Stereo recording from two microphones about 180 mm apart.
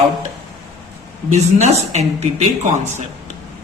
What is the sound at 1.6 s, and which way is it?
Speech, 40° right (ahead or behind).